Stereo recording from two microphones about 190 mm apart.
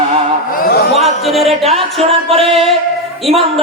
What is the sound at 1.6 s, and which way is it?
Music, 30° right (ahead or behind).